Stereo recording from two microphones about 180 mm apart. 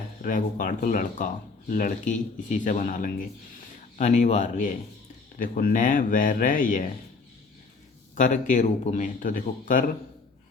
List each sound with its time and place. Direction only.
0.2 s speech: 45° left (ahead or behind)
8.1 s speech: 45° left (ahead or behind)